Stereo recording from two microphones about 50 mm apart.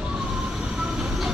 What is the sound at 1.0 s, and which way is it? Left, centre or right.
Train, centre.